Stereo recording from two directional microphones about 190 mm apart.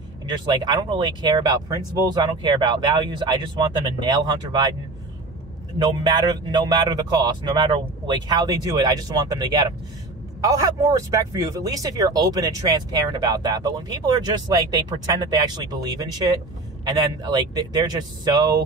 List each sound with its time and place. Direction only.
0.3 s speech: 20° right (ahead or behind)
5.8 s speech: 20° right (ahead or behind)